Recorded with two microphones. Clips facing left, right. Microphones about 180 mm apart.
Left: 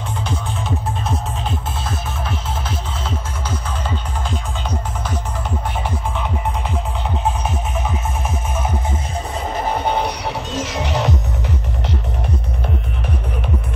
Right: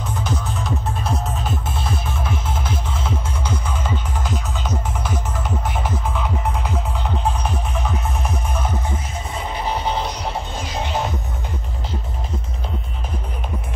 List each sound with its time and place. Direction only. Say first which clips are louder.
9.5 s music: left 3 dB; 55° left (ahead or behind); by 11.1 s 75° left (ahead or behind)